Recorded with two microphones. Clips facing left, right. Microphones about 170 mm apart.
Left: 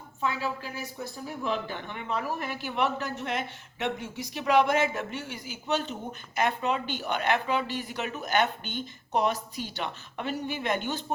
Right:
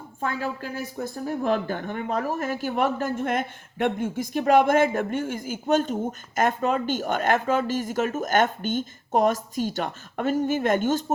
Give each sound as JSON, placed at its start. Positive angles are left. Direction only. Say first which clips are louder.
{"t": 0.2, "sound": "a woman's voice", "louder": "right 2 dB", "side_deg": -50}